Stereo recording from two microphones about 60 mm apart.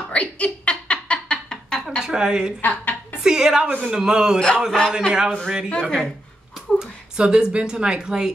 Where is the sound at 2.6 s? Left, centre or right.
Left.